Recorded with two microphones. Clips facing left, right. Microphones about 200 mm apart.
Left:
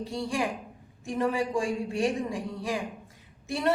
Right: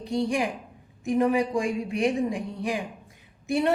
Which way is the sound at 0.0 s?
15° right (ahead or behind).